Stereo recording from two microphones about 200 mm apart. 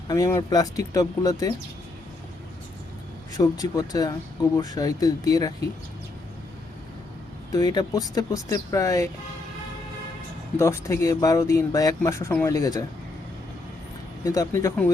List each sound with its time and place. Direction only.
0.1 s speech: 15° left (ahead or behind)
3.3 s speech: 20° left (ahead or behind)
7.5 s speech: 20° left (ahead or behind)
10.6 s speech: 15° left (ahead or behind)
14.3 s speech: 15° left (ahead or behind)